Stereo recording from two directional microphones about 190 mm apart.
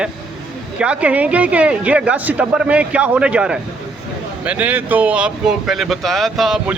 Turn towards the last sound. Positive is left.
turn(degrees=0)  # may be behind; listen again after turning